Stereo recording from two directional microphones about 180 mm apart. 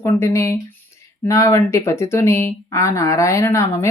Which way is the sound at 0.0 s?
15° left (ahead or behind).